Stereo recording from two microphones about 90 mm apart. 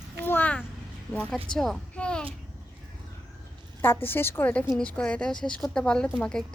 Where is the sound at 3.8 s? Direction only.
25° left (ahead or behind).